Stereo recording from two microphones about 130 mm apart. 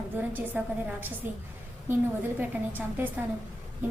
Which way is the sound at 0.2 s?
10° right (ahead or behind).